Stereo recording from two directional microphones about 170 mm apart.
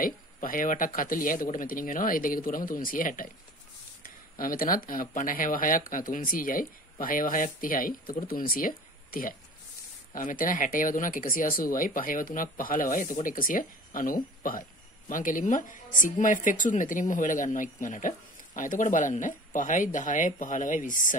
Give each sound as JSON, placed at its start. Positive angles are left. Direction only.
{"t": 0.0, "sound": "speech", "side_deg": 55}